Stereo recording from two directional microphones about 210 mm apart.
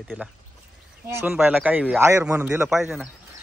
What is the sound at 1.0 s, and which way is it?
Speech, 10° right (ahead or behind).